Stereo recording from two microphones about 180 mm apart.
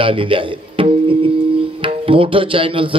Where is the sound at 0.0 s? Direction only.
30° right (ahead or behind).